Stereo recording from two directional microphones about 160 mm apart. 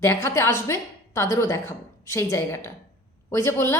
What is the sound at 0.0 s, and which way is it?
A woman's voice, 15° left (ahead or behind).